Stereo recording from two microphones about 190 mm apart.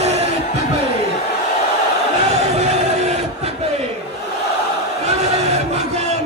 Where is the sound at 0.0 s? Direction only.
35° right (ahead or behind).